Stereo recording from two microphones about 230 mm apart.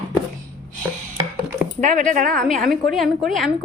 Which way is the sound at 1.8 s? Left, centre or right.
Right.